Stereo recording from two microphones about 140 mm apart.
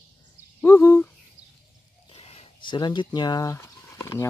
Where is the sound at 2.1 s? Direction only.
45° left (ahead or behind).